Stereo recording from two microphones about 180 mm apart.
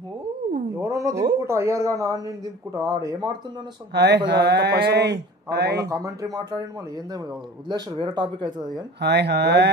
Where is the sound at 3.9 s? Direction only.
65° right (ahead or behind).